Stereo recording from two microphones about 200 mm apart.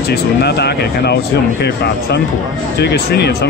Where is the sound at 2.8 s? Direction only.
55° left (ahead or behind).